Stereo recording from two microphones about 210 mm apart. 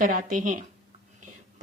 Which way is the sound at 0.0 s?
40° right (ahead or behind).